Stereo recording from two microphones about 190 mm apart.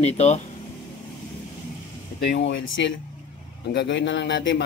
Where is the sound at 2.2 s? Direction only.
65° left (ahead or behind).